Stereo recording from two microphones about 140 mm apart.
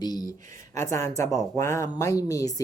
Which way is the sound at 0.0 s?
30° left (ahead or behind).